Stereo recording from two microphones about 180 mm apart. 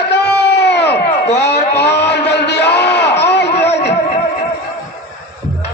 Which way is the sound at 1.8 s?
70° left (ahead or behind).